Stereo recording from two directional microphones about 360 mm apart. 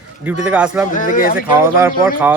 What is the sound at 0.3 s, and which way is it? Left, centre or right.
Speech, centre.